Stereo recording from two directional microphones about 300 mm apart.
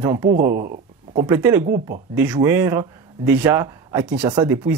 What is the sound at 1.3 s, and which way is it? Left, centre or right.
Speech, centre.